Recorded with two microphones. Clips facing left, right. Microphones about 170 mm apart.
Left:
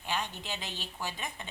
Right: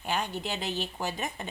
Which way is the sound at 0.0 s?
45° right (ahead or behind).